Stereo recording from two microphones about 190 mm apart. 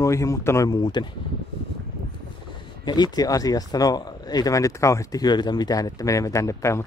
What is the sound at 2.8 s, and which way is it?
Speech, 20° left (ahead or behind).